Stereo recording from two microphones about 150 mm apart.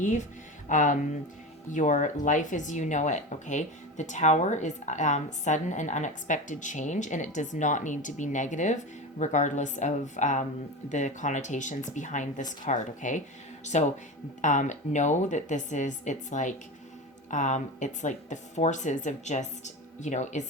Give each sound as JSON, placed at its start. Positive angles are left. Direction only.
{"t": 0.7, "sound": "speech", "side_deg": 60}
{"t": 14.4, "sound": "speech", "side_deg": 55}